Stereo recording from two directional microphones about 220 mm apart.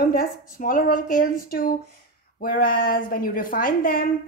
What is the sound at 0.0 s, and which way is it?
A woman's voice, 40° left (ahead or behind).